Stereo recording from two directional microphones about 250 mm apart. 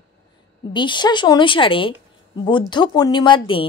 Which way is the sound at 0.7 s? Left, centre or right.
Centre.